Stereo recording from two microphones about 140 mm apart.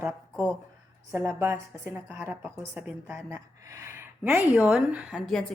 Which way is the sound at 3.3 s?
20° right (ahead or behind).